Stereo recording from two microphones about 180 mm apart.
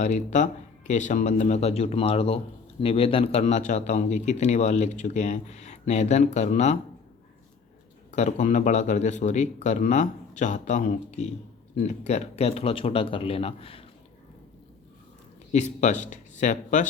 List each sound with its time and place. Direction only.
0.0 s a man's voice: 40° left (ahead or behind)
8.1 s a man's voice: 40° left (ahead or behind)
15.5 s a man's voice: 40° left (ahead or behind)